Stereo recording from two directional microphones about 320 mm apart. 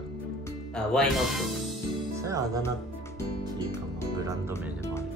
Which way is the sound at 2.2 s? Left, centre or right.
Centre.